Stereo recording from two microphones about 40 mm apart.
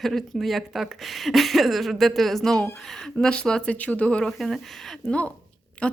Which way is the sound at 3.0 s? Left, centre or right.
Centre.